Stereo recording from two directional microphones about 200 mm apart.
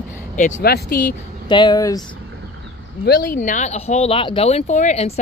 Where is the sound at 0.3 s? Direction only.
40° left (ahead or behind).